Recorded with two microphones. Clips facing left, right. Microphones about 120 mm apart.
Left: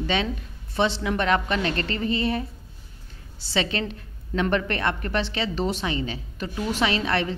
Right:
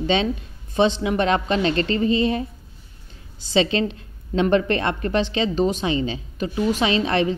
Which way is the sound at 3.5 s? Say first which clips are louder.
Right 6 dB; 25° right (ahead or behind).